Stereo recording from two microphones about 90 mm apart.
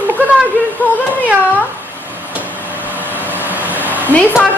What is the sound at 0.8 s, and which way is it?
Speech, 20° left (ahead or behind).